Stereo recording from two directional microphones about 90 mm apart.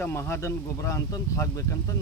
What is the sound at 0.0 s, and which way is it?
Speech, 30° left (ahead or behind).